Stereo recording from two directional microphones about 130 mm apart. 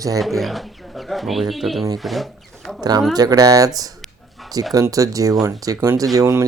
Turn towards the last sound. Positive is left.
turn(degrees=-25)  # may be behind; listen again after turning